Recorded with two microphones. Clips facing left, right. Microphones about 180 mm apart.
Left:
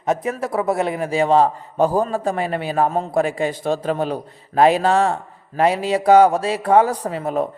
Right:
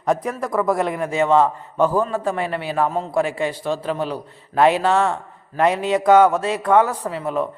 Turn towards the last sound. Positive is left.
turn(degrees=40)  # may be behind; listen again after turning